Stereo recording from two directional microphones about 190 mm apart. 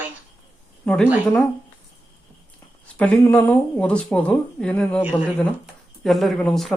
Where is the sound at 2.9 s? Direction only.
5° left (ahead or behind).